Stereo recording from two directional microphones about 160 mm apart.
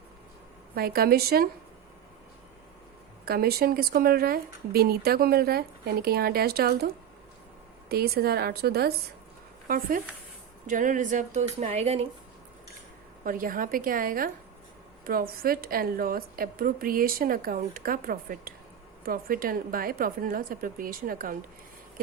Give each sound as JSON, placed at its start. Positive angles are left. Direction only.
{"t": 0.8, "sound": "speech", "side_deg": -70}
{"t": 3.2, "sound": "speech", "side_deg": -70}
{"t": 9.6, "sound": "a woman's voice", "side_deg": -65}
{"t": 13.2, "sound": "a woman's voice", "side_deg": -60}